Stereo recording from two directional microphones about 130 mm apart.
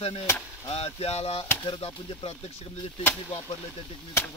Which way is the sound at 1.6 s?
40° left (ahead or behind).